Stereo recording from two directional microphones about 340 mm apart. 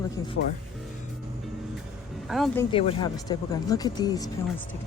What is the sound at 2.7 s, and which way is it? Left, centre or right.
Speech, centre.